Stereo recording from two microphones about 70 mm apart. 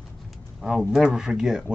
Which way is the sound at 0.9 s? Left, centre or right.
Centre.